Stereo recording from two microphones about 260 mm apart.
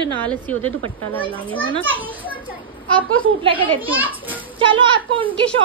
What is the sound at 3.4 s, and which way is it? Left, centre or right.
Speech, centre.